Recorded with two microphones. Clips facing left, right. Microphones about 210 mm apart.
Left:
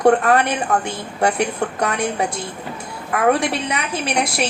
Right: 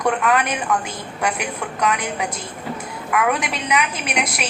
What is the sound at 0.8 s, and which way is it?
A woman's voice, 30° left (ahead or behind).